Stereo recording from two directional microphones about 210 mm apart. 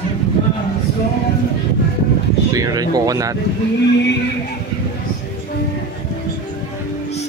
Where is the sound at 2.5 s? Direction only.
15° right (ahead or behind).